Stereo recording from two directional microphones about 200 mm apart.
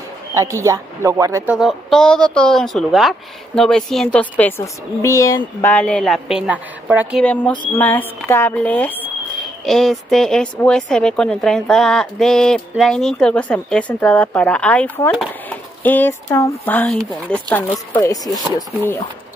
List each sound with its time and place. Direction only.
0.3 s a woman's voice: 15° right (ahead or behind)
7.5 s a sound: 25° left (ahead or behind)
7.8 s a woman's voice: 10° left (ahead or behind)